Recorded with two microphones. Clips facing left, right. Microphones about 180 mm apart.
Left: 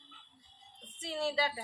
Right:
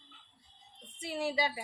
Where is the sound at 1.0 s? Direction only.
15° right (ahead or behind).